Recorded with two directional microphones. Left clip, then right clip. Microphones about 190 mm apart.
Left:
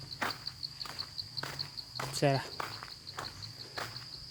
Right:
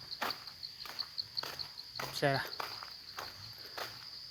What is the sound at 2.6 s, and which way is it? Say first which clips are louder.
Insect: left 2 dB; 50° right (ahead or behind).